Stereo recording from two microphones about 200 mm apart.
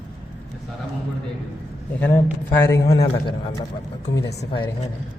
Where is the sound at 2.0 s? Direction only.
10° left (ahead or behind).